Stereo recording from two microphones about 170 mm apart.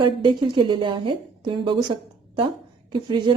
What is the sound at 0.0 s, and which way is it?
A woman's voice, 25° right (ahead or behind).